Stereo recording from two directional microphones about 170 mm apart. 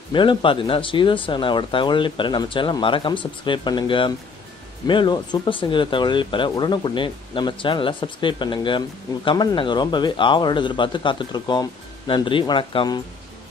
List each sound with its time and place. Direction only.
0.1 s speech: 30° left (ahead or behind)